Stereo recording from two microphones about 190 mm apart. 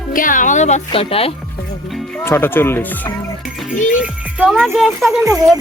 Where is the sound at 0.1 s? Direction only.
45° left (ahead or behind); by 1.3 s 30° left (ahead or behind).